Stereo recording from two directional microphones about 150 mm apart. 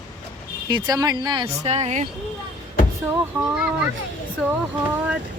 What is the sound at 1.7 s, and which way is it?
Speech, 45° right (ahead or behind).